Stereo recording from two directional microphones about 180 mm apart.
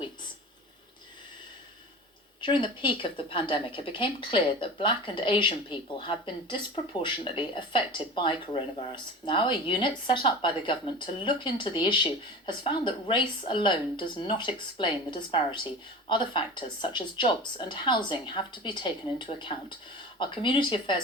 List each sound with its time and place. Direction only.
2.4 s speech: 25° left (ahead or behind)